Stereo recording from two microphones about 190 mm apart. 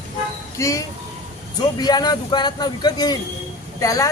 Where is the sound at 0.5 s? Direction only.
15° left (ahead or behind).